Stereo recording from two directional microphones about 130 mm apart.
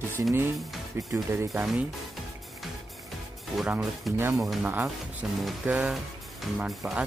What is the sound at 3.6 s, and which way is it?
Speech, centre (ahead or behind).